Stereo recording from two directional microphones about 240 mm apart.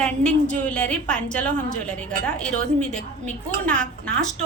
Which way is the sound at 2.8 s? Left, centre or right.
Centre.